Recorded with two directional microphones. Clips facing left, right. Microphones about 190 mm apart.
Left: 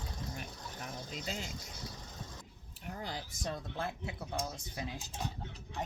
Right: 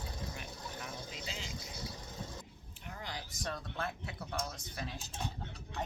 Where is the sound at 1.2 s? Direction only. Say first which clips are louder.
Left 7 dB; 45° left (ahead or behind).